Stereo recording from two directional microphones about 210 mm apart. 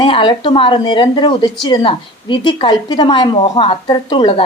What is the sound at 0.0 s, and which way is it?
Speech, 25° left (ahead or behind).